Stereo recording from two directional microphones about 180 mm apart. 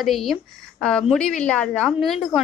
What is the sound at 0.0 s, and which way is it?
A woman's voice, centre (ahead or behind).